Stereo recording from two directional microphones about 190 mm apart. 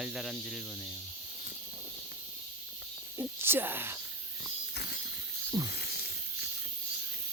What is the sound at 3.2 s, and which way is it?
Speech, 10° right (ahead or behind).